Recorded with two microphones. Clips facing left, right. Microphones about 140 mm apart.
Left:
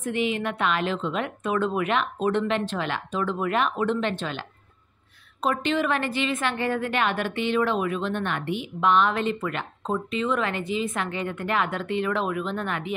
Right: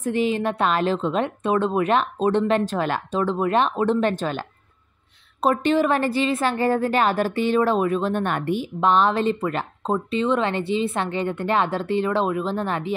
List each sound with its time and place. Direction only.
0.0 s a woman's voice: 35° right (ahead or behind)